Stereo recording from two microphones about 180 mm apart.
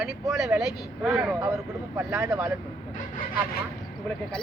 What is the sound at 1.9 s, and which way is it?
Speech, 15° right (ahead or behind).